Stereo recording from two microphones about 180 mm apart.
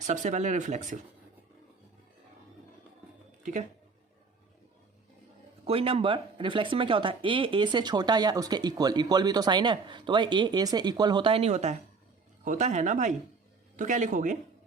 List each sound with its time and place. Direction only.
0.0 s speech: 45° right (ahead or behind)
3.4 s speech: 45° right (ahead or behind)
5.6 s speech: 30° right (ahead or behind)